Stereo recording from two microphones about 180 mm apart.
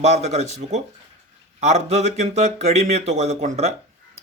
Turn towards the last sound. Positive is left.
turn(degrees=-40)  # may be behind; listen again after turning